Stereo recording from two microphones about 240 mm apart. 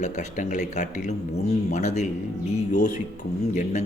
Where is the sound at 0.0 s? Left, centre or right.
Left.